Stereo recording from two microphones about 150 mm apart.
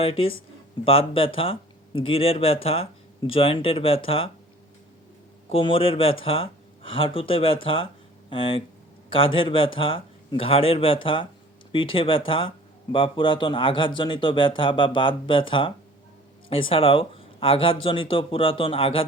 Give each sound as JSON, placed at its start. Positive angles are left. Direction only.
{"t": 0.0, "sound": "speech", "side_deg": 40}
{"t": 5.5, "sound": "speech", "side_deg": 35}